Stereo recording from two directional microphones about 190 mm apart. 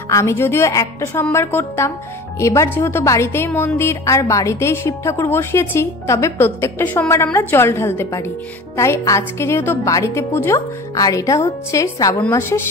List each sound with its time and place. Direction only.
0.1 s speech: 15° left (ahead or behind)